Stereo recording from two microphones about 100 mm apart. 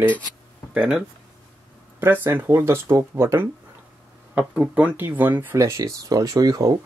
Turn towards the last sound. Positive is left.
turn(degrees=-35)  # may be behind; listen again after turning